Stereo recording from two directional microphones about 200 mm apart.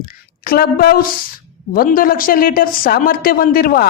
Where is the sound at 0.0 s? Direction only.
45° left (ahead or behind).